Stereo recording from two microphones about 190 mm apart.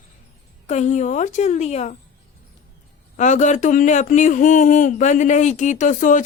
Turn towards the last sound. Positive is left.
turn(degrees=40)  # may be behind; listen again after turning